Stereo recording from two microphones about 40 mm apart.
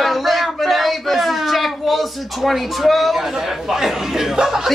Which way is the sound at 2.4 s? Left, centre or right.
Centre.